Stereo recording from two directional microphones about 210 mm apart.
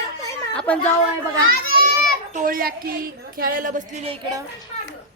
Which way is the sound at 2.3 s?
40° right (ahead or behind).